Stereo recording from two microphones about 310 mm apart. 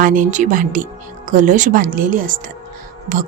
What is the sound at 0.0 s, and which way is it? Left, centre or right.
Speech, right.